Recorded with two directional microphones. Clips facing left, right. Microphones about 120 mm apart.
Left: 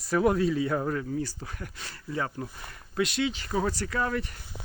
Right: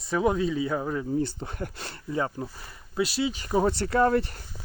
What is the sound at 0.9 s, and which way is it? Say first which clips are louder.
Speech: right 4 dB; 20° right (ahead or behind).